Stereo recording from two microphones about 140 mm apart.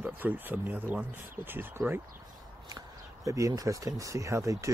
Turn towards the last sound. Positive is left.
turn(degrees=-25)  # may be behind; listen again after turning